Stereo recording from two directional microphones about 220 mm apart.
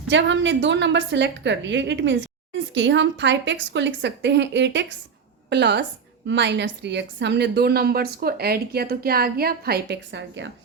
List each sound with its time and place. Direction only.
0.1 s a woman's voice: 55° right (ahead or behind)